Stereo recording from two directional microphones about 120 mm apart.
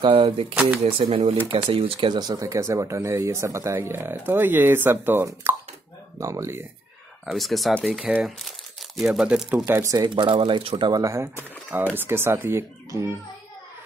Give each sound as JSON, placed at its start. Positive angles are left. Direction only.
{"t": 0.0, "sound": "speech", "side_deg": -45}
{"t": 1.0, "sound": "speech", "side_deg": -60}
{"t": 1.5, "sound": "speech", "side_deg": -50}
{"t": 7.3, "sound": "speech", "side_deg": 0}
{"t": 9.7, "sound": "speech", "side_deg": -25}
{"t": 10.0, "sound": "speech", "side_deg": -40}
{"t": 10.9, "sound": "speech", "side_deg": -25}